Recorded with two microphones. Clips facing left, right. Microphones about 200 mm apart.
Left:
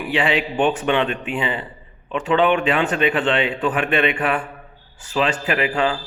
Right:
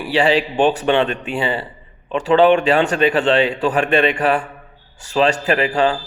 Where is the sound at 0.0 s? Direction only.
35° right (ahead or behind).